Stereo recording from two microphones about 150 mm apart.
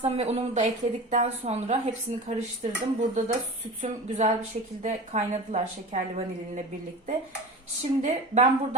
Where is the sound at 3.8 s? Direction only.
55° right (ahead or behind).